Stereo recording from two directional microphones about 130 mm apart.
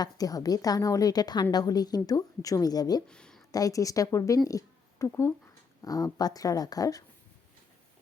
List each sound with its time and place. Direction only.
0.0 s a woman's voice: 30° left (ahead or behind)
3.1 s a sound: 5° left (ahead or behind)
3.5 s a woman's voice: 25° left (ahead or behind)